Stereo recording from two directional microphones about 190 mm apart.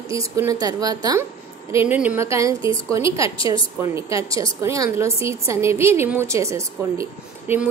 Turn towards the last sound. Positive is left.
turn(degrees=-15)  # may be behind; listen again after turning